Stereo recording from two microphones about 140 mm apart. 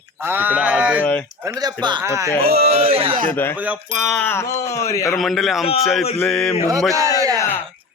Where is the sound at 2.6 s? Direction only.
45° right (ahead or behind).